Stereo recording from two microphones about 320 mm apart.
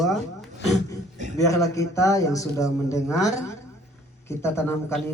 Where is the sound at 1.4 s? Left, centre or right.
Centre.